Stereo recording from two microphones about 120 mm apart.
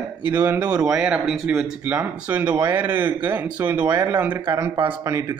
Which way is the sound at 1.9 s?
15° right (ahead or behind).